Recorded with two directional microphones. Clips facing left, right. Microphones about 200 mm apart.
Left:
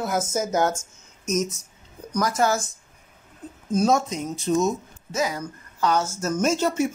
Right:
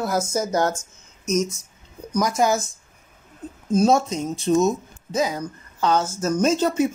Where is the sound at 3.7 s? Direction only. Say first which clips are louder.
Right 3 dB; 25° right (ahead or behind).